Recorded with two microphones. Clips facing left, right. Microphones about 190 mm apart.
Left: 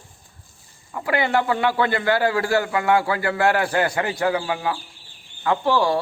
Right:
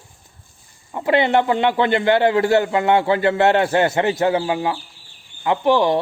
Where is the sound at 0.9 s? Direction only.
25° right (ahead or behind).